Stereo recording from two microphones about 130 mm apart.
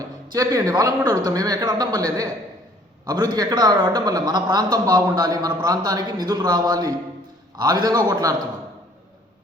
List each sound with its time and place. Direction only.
0.3 s a man's voice: 30° right (ahead or behind)